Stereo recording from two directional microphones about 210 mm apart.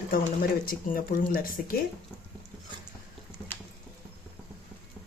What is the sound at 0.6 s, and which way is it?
Speech, 45° left (ahead or behind).